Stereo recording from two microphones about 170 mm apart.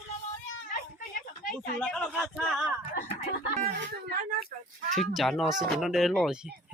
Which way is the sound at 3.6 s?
70° right (ahead or behind).